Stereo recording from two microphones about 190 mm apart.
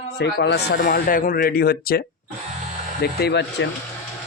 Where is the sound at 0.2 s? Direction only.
60° left (ahead or behind).